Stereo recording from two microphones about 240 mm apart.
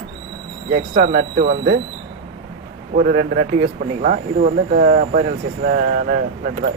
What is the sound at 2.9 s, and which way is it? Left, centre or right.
Speech, right.